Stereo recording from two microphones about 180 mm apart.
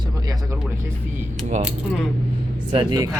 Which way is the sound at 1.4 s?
Centre (ahead or behind).